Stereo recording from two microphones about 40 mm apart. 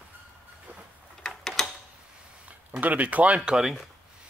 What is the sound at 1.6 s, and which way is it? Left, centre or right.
Mechanisms, centre.